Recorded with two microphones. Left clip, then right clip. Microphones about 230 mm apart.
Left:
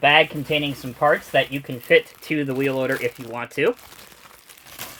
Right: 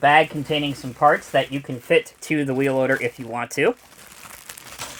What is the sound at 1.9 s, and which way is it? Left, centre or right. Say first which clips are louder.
Speech: left 1 dB; right.